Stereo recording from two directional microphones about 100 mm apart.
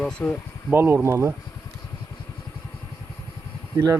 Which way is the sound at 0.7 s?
25° right (ahead or behind).